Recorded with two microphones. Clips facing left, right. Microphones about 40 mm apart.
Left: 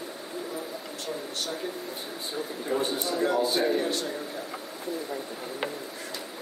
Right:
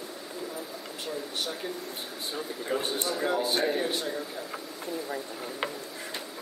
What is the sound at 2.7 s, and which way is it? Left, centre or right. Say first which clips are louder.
Speech: left 3 dB; right.